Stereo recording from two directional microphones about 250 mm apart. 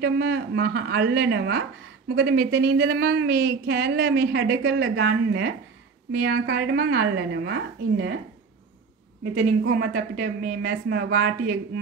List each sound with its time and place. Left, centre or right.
0.0 s speech: right
9.3 s speech: right